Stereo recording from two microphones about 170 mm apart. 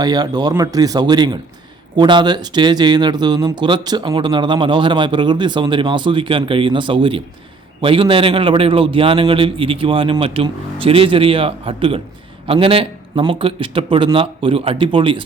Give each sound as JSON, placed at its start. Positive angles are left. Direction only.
{"t": 0.0, "sound": "a man's voice", "side_deg": -25}